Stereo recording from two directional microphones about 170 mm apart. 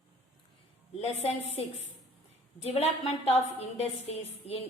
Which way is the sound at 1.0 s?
35° left (ahead or behind).